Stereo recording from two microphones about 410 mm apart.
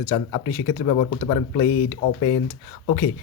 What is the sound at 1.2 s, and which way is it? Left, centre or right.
Speech, left.